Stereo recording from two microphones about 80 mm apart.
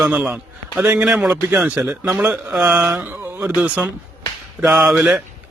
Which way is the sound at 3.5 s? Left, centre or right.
Centre.